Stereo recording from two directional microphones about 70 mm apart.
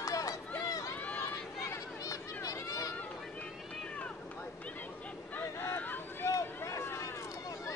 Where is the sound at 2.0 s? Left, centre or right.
Left.